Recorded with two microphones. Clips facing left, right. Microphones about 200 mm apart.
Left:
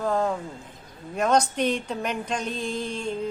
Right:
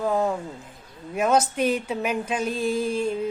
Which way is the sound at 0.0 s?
5° right (ahead or behind).